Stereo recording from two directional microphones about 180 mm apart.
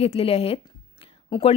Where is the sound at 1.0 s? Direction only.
30° left (ahead or behind).